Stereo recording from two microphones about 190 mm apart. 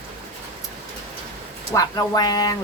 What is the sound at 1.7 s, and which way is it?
Speech, 15° left (ahead or behind).